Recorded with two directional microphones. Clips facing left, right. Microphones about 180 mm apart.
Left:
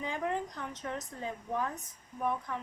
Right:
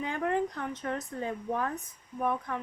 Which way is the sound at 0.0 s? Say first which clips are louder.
Right 5 dB; 60° right (ahead or behind).